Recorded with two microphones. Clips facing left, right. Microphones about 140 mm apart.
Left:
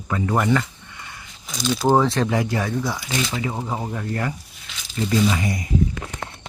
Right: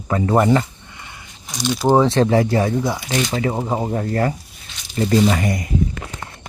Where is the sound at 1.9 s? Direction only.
20° right (ahead or behind).